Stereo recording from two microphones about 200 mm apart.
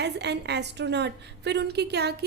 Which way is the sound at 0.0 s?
55° right (ahead or behind).